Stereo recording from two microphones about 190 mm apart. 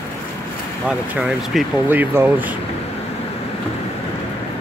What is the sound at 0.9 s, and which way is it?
Speech, 5° right (ahead or behind).